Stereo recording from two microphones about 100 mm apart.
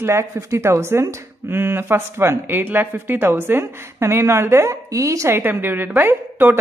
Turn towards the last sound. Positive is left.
turn(degrees=-20)  # may be behind; listen again after turning